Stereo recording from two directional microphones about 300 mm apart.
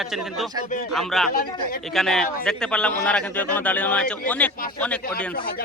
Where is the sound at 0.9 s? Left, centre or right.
Centre.